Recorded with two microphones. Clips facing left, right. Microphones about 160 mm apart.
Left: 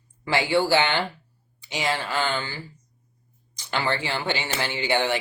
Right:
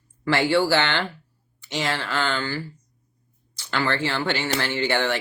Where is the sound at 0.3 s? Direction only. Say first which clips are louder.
Right 2 dB; 15° left (ahead or behind).